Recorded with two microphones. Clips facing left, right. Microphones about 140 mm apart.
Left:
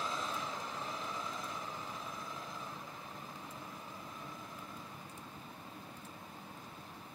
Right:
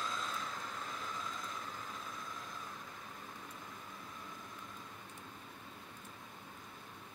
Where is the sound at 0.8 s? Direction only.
20° left (ahead or behind).